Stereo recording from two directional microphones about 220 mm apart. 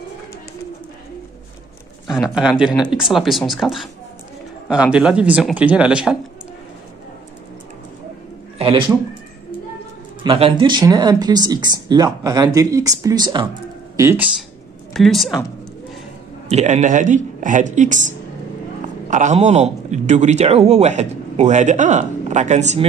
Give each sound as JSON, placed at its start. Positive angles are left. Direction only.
{"t": 2.3, "sound": "speech", "side_deg": -5}
{"t": 8.5, "sound": "speech", "side_deg": -25}
{"t": 10.2, "sound": "speech", "side_deg": -25}
{"t": 13.9, "sound": "speech", "side_deg": -10}
{"t": 15.0, "sound": "speech", "side_deg": 0}
{"t": 16.4, "sound": "a man's voice", "side_deg": -30}
{"t": 19.0, "sound": "a man's voice", "side_deg": -35}